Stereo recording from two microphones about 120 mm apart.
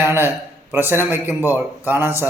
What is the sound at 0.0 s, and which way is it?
A man's voice, 20° right (ahead or behind).